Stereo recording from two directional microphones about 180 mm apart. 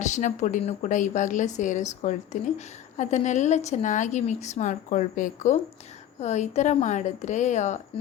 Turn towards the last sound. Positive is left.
turn(degrees=40)  # may be behind; listen again after turning